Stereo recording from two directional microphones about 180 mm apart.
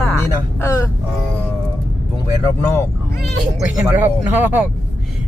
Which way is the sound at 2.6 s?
15° left (ahead or behind).